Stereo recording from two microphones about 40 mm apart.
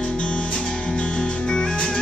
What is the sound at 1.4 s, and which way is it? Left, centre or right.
Music, centre.